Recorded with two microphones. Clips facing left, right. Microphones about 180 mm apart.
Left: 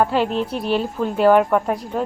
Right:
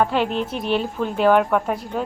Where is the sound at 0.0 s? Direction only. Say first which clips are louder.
Left 2 dB; 5° left (ahead or behind).